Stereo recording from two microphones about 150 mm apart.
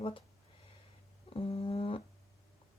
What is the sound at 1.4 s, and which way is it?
Speech, 40° left (ahead or behind).